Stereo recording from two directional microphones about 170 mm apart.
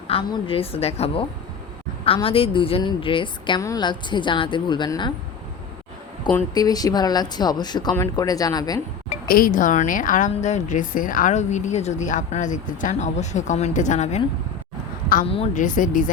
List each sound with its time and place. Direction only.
0.1 s a woman's voice: 30° left (ahead or behind)
6.5 s a woman's voice: 20° left (ahead or behind)
9.2 s a woman's voice: 60° left (ahead or behind)
15.5 s a woman's voice: 50° left (ahead or behind)